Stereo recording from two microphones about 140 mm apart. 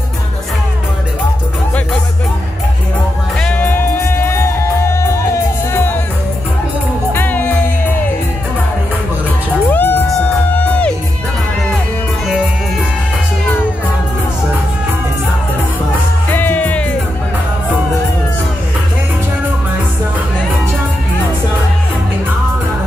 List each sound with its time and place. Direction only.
3.3 s music: 10° left (ahead or behind)
7.1 s music: 15° left (ahead or behind)
9.7 s cat: 15° left (ahead or behind)
10.0 s music: 10° left (ahead or behind)
16.3 s music: 15° left (ahead or behind)